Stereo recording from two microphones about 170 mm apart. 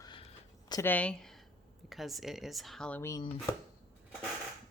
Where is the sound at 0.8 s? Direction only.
10° left (ahead or behind).